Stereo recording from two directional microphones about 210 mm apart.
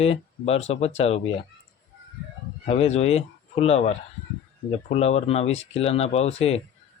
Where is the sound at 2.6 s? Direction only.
30° left (ahead or behind).